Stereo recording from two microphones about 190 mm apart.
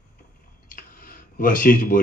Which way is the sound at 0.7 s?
45° left (ahead or behind).